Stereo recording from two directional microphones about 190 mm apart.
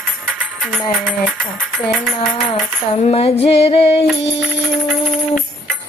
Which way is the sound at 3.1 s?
30° left (ahead or behind).